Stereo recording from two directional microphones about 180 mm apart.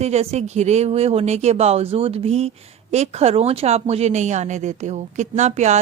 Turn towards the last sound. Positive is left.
turn(degrees=-40)  # may be behind; listen again after turning